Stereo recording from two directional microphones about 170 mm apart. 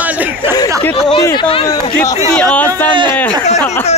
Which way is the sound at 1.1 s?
25° left (ahead or behind).